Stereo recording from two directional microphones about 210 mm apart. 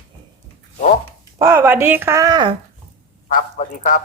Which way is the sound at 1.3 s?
10° right (ahead or behind).